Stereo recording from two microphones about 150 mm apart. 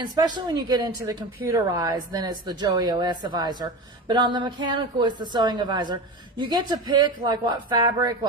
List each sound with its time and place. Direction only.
0.3 s a woman's voice: 30° right (ahead or behind)